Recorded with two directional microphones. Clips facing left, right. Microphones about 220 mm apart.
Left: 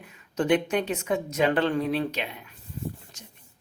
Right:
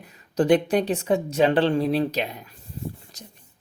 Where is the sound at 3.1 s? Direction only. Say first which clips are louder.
Right 5 dB; 35° right (ahead or behind).